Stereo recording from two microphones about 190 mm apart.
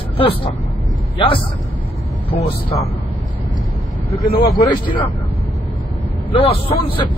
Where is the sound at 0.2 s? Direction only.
30° left (ahead or behind).